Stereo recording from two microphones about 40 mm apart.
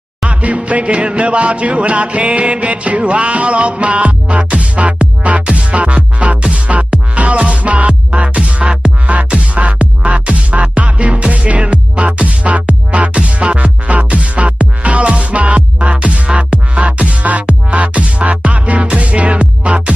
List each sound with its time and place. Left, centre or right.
0.3 s music: right